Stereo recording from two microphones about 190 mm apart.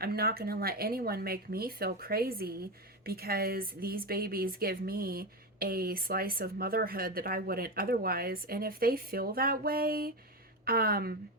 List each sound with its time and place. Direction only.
0.0 s speech: 55° right (ahead or behind)